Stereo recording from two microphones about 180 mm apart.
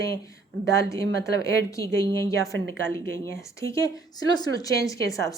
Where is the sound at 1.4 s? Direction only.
15° left (ahead or behind).